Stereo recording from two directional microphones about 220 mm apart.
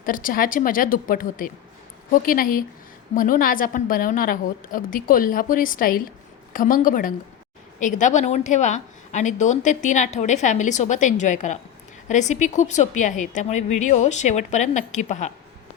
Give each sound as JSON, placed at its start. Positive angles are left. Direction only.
{"t": 0.0, "sound": "a woman's voice", "side_deg": 40}